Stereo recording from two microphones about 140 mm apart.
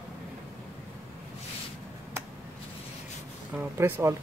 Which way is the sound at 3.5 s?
15° right (ahead or behind).